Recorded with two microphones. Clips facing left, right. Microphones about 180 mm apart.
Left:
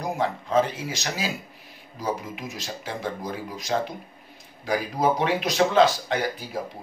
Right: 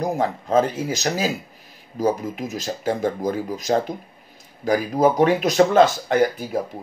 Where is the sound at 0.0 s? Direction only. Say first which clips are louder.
Right 4 dB; 40° right (ahead or behind).